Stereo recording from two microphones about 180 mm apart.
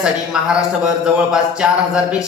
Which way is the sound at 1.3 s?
5° right (ahead or behind).